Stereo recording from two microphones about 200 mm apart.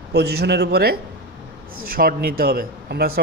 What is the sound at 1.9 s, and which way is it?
A man's voice, 45° right (ahead or behind).